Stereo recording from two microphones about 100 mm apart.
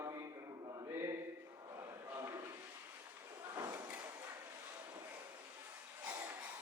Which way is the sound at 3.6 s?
30° right (ahead or behind).